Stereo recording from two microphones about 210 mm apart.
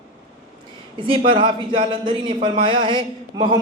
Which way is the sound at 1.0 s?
25° right (ahead or behind).